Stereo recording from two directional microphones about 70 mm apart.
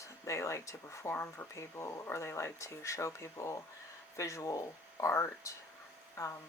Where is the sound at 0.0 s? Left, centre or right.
Left.